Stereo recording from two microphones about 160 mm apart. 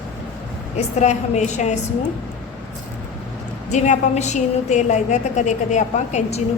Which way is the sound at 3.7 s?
50° left (ahead or behind).